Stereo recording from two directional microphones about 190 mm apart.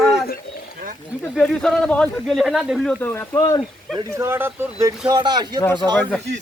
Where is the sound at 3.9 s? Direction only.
15° right (ahead or behind).